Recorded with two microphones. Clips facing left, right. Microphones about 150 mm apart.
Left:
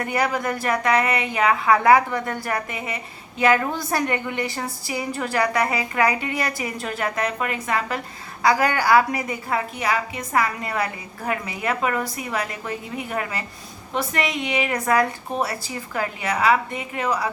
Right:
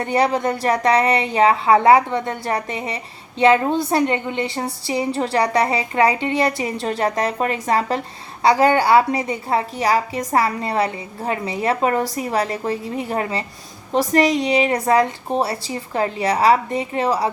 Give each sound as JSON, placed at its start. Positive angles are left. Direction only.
{"t": 0.0, "sound": "a woman's voice", "side_deg": -30}